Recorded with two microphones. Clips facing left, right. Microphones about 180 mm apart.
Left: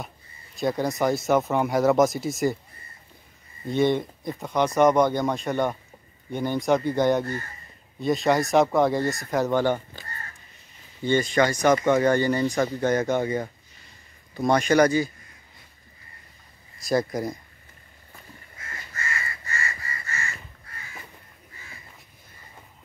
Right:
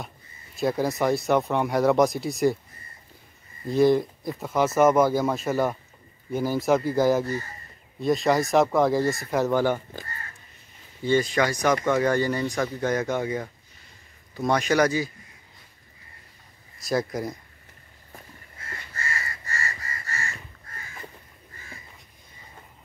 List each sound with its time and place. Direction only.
0.6 s speech: centre (ahead or behind)
3.6 s speech: centre (ahead or behind)
11.0 s speech: centre (ahead or behind)
11.7 s speech: 25° left (ahead or behind)
12.0 s speech: centre (ahead or behind)
14.5 s speech: 5° right (ahead or behind)
16.8 s speech: centre (ahead or behind)
18.9 s crow: 35° right (ahead or behind)